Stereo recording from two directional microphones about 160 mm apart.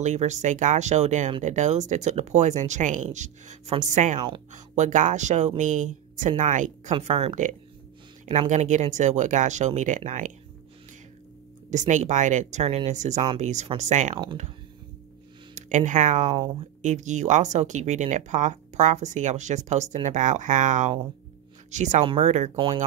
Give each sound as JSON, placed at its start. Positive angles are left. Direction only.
{"t": 0.0, "sound": "speech", "side_deg": -45}
{"t": 6.9, "sound": "speech", "side_deg": -40}
{"t": 11.9, "sound": "speech", "side_deg": -50}
{"t": 15.5, "sound": "speech", "side_deg": -50}
{"t": 22.0, "sound": "speech", "side_deg": -35}